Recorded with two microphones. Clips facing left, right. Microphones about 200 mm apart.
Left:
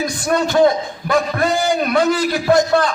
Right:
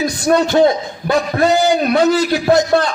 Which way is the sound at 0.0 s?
30° right (ahead or behind).